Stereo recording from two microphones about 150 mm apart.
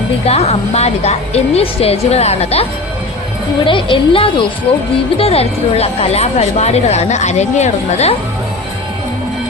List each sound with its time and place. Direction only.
0.3 s speech: 45° left (ahead or behind)
3.6 s a woman's voice: 35° left (ahead or behind)